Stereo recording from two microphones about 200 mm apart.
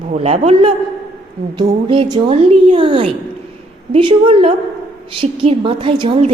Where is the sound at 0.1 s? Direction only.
30° right (ahead or behind).